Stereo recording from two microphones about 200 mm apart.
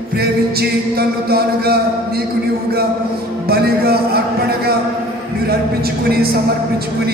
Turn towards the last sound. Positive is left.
turn(degrees=-50)  # may be behind; listen again after turning